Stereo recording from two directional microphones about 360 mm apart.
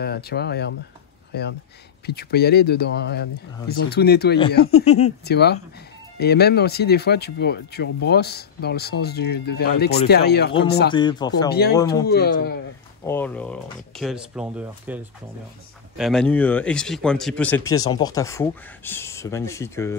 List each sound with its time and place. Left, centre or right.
0.0 s speech: left
10.9 s speech: centre
12.1 s speech: left
13.0 s speech: centre
16.0 s speech: centre